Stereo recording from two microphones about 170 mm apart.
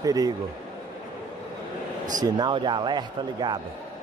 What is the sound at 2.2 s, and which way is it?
Speech, 25° right (ahead or behind).